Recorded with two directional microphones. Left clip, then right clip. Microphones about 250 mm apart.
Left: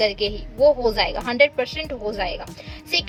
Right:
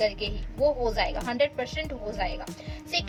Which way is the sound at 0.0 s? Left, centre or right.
Left.